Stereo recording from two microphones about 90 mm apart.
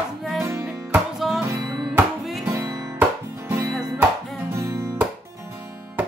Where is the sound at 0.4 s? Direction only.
35° right (ahead or behind).